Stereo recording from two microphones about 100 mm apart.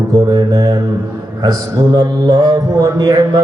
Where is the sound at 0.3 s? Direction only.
45° right (ahead or behind).